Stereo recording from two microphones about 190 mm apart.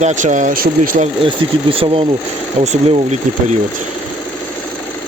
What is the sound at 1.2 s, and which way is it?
Speech, 30° right (ahead or behind).